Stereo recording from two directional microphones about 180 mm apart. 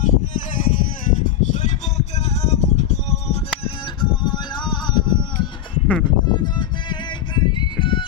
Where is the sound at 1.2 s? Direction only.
40° left (ahead or behind).